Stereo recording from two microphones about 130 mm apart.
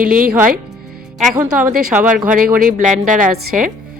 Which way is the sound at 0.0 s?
90° right.